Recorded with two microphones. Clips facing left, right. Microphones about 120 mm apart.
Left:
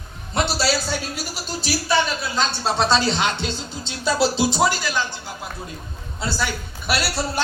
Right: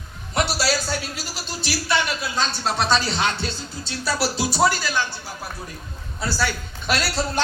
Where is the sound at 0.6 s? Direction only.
Centre (ahead or behind).